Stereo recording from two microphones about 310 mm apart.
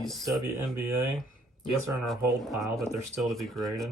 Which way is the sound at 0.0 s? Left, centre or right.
Centre.